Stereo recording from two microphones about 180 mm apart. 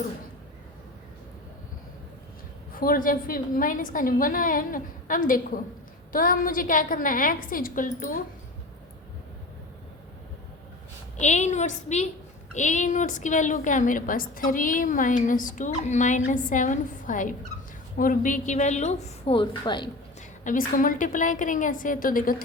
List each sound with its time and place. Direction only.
2.7 s a woman's voice: 50° left (ahead or behind)
11.2 s a woman's voice: 40° left (ahead or behind)
20.4 s a woman's voice: 45° left (ahead or behind)